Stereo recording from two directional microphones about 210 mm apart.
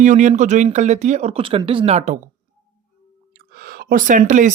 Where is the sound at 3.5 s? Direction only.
45° right (ahead or behind).